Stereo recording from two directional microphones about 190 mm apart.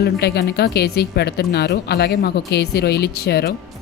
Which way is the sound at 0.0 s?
60° left (ahead or behind).